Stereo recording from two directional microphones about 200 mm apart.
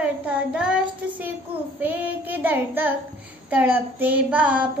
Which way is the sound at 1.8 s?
10° right (ahead or behind).